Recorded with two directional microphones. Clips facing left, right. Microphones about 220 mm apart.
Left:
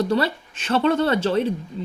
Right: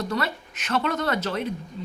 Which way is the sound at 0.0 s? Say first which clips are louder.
Left 7 dB; 30° left (ahead or behind).